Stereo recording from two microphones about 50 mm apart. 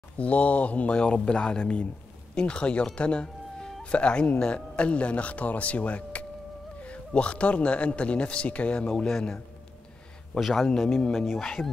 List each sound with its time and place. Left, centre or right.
0.2 s speech: left; by 9.4 s centre
10.4 s speech: centre